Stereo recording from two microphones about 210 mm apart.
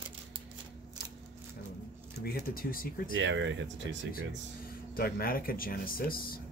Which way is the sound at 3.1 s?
60° right (ahead or behind).